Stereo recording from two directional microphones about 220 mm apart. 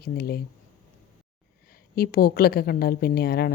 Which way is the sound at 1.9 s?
45° left (ahead or behind).